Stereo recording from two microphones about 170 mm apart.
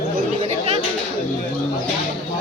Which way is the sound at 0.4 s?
35° right (ahead or behind).